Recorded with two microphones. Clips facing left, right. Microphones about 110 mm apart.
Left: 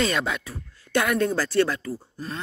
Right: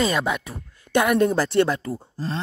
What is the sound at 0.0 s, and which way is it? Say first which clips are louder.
Speech: right 3 dB; 10° right (ahead or behind).